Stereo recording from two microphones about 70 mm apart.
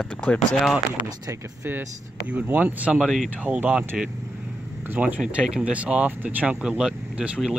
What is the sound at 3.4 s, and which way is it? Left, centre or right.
Speech, centre.